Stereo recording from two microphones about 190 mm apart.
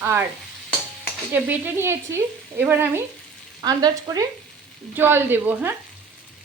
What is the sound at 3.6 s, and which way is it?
Frying, 20° right (ahead or behind).